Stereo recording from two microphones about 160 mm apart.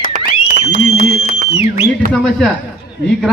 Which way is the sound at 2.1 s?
Centre (ahead or behind).